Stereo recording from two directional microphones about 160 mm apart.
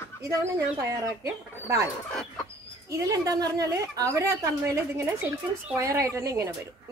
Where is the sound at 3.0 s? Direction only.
20° right (ahead or behind).